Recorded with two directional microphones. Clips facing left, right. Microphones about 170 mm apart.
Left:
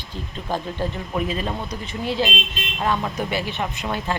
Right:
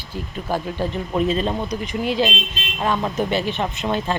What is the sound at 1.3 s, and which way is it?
Speech, 25° right (ahead or behind).